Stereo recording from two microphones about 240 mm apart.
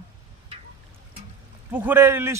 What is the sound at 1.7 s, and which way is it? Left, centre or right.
Speech, centre.